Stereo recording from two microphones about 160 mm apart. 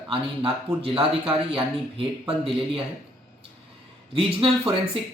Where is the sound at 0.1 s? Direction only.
35° right (ahead or behind).